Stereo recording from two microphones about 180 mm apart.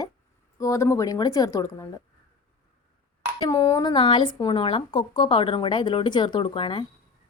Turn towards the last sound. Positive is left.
turn(degrees=30)  # may be behind; listen again after turning